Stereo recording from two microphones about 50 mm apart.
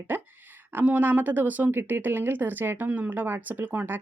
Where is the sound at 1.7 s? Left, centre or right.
Right.